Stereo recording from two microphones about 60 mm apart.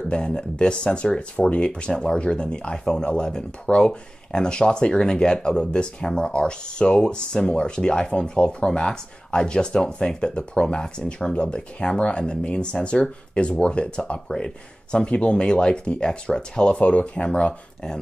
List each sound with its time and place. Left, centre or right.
0.1 s speech: centre